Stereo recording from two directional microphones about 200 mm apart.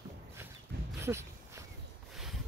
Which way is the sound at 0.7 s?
55° right (ahead or behind).